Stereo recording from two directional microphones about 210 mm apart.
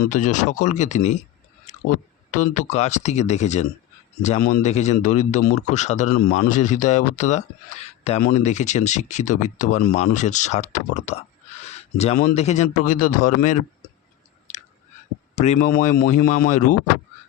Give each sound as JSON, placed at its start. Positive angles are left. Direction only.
{"t": 0.0, "sound": "speech", "side_deg": 35}
{"t": 1.7, "sound": "a sound", "side_deg": 35}
{"t": 2.3, "sound": "speech", "side_deg": 35}
{"t": 14.5, "sound": "chewing", "side_deg": 35}
{"t": 15.4, "sound": "speech", "side_deg": 35}